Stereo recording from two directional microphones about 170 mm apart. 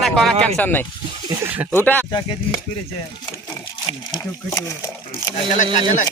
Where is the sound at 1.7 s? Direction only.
10° left (ahead or behind).